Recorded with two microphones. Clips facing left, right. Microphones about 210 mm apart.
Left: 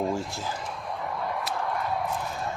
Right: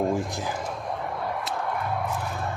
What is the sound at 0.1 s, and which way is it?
Speech, 15° right (ahead or behind).